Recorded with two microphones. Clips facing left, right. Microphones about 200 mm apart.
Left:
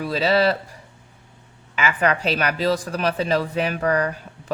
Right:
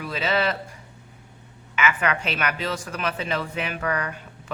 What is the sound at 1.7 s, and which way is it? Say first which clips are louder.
Speech: left 3 dB; 35° left (ahead or behind).